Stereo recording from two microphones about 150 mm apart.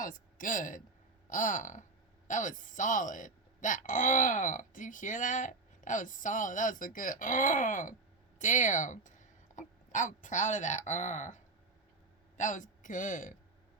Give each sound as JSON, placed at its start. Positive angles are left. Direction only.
{"t": 0.0, "sound": "speech", "side_deg": 60}
{"t": 12.4, "sound": "speech", "side_deg": 55}